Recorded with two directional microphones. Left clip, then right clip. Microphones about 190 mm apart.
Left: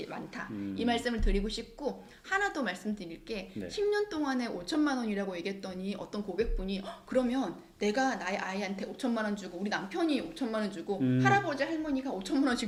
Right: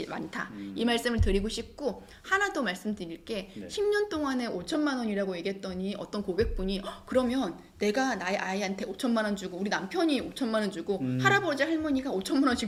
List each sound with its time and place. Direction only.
0.0 s speech: 45° right (ahead or behind)